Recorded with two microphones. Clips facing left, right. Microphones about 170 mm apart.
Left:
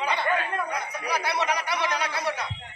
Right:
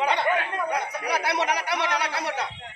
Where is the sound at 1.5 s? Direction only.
70° right (ahead or behind).